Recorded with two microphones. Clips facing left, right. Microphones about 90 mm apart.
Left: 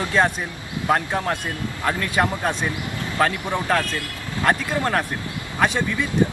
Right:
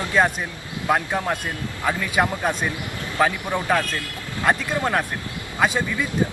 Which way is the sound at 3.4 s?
20° left (ahead or behind).